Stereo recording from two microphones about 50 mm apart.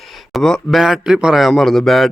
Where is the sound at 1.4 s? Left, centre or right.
Centre.